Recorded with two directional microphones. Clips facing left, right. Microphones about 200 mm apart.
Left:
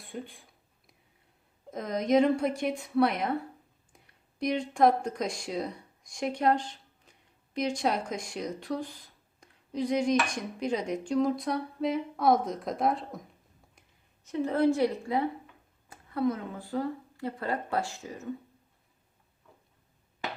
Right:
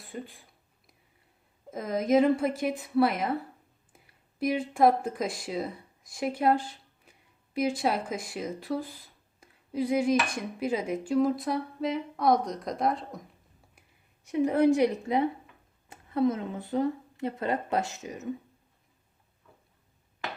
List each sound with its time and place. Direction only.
0.0 s speech: centre (ahead or behind)
1.7 s a woman's voice: 5° right (ahead or behind)
14.3 s a woman's voice: 15° right (ahead or behind)